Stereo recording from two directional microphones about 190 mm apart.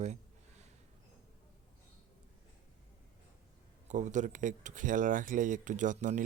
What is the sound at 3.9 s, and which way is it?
Speech, 40° right (ahead or behind).